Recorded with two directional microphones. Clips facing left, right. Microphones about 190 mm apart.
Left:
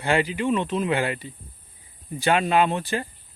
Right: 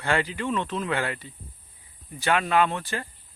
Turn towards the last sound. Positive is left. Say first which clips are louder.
# left 2 dB
turn(degrees=20)  # may be behind; listen again after turning